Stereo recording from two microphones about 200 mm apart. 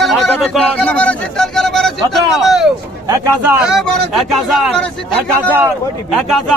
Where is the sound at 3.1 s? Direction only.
10° right (ahead or behind).